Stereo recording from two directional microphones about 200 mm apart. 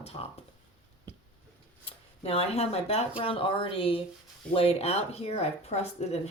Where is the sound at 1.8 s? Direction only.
30° left (ahead or behind).